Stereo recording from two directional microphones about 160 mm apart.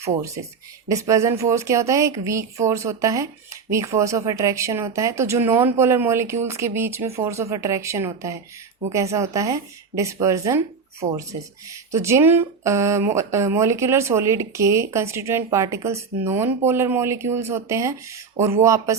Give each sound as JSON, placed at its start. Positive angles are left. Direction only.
{"t": 0.9, "sound": "speech", "side_deg": -20}
{"t": 11.7, "sound": "speech", "side_deg": -20}